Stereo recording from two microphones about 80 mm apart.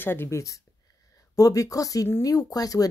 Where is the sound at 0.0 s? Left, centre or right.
Left.